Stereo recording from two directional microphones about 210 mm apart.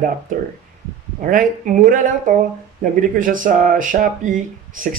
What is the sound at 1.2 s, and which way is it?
Speech, 40° right (ahead or behind).